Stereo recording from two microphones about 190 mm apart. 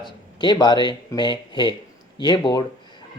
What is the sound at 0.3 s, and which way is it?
Speech, 25° left (ahead or behind).